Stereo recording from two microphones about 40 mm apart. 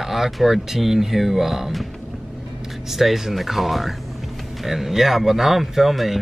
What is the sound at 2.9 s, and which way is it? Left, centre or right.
Speech, centre.